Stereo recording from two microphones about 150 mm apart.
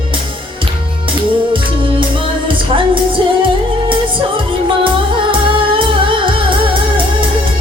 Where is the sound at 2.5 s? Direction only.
35° right (ahead or behind).